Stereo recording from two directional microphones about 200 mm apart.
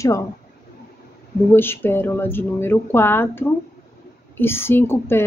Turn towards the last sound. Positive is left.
turn(degrees=10)  # may be behind; listen again after turning